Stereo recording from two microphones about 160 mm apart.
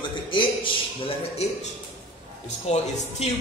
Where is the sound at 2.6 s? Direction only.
45° left (ahead or behind).